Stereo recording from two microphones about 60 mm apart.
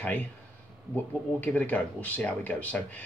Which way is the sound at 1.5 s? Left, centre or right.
Left.